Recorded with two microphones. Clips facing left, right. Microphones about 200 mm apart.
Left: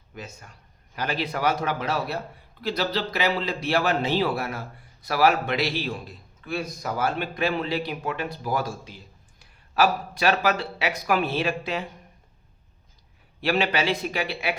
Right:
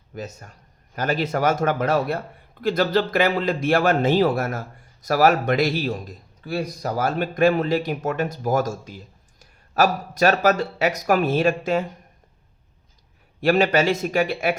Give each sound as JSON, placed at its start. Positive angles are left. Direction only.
{"t": 0.1, "sound": "a man's voice", "side_deg": -40}
{"t": 13.4, "sound": "a man's voice", "side_deg": -45}